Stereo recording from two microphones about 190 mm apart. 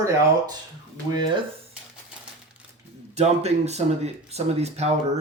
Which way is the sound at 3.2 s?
35° right (ahead or behind).